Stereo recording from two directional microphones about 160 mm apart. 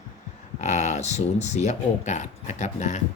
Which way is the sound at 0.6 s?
45° left (ahead or behind).